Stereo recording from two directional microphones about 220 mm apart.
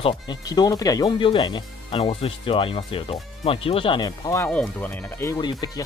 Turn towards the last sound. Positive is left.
turn(degrees=20)  # may be behind; listen again after turning